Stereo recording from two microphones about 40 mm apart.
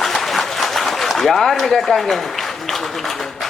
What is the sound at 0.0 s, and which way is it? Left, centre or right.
A man's voice, centre.